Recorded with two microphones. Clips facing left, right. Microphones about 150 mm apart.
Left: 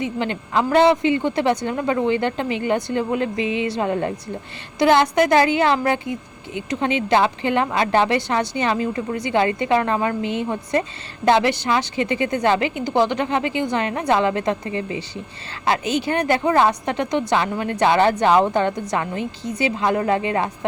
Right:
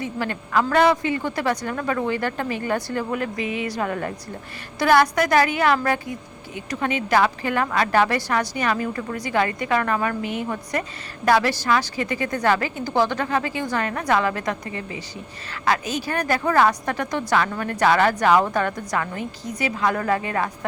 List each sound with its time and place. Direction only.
0.0 s a woman's voice: 20° left (ahead or behind)